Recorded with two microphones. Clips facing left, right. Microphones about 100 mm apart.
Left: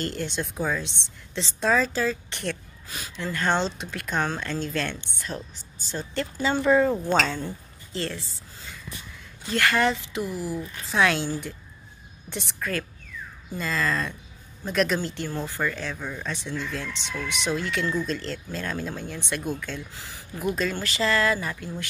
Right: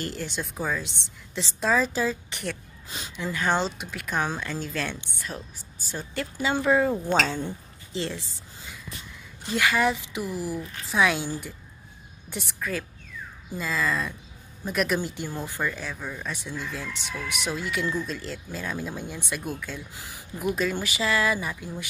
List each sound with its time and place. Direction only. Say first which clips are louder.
0.0 s speech: left 3 dB; 5° right (ahead or behind)
7.3 s a woman's voice: right 1 dB; 15° right (ahead or behind)
10.4 s speech: left 1 dB; 20° left (ahead or behind)
10.9 s speech: left 1 dB; 5° right (ahead or behind)